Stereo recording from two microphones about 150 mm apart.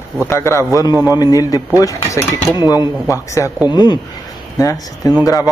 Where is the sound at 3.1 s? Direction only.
20° left (ahead or behind).